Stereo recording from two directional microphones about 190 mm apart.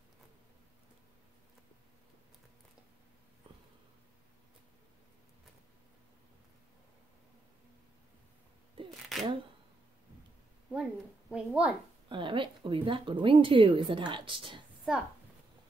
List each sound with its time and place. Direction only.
9.1 s single-lens reflex camera: centre (ahead or behind)
10.7 s speech: 5° right (ahead or behind)
12.1 s a woman's voice: 25° right (ahead or behind)